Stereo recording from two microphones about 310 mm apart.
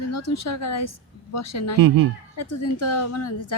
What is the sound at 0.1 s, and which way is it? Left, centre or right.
A woman's voice, left.